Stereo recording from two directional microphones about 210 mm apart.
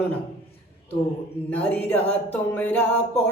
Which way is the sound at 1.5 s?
5° left (ahead or behind).